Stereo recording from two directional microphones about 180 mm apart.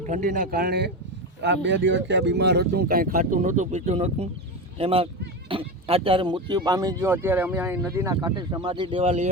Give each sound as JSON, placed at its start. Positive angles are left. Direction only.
{"t": 0.0, "sound": "speech", "side_deg": -45}
{"t": 1.6, "sound": "speech", "side_deg": -90}